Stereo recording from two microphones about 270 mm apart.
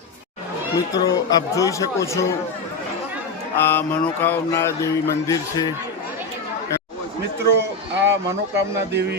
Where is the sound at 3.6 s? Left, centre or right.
Centre.